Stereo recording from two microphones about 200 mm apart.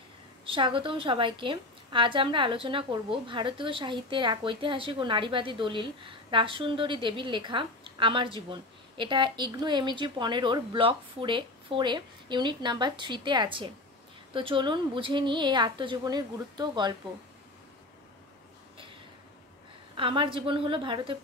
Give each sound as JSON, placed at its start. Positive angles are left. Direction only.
{"t": 0.5, "sound": "a woman's voice", "side_deg": -25}
{"t": 20.0, "sound": "a woman's voice", "side_deg": -25}